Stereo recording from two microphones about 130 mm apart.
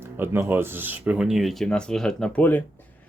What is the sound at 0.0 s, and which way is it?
Speech, 15° right (ahead or behind).